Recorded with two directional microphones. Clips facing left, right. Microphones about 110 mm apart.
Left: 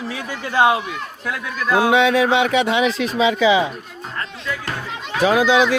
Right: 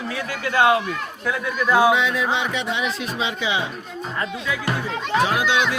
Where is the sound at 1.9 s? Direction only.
85° left.